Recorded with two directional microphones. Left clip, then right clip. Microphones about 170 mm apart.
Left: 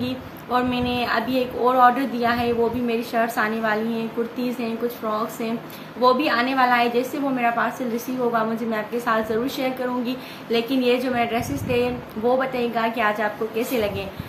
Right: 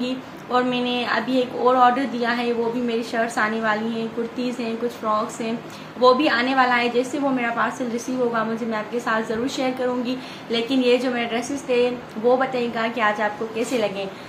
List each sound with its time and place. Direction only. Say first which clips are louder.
0.0 s a woman's voice: right 1 dB; 5° left (ahead or behind)